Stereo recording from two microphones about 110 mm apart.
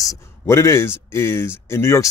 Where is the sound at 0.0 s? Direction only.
30° left (ahead or behind).